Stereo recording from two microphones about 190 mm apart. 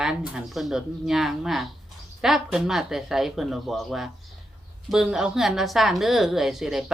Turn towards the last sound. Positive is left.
turn(degrees=0)  # may be behind; listen again after turning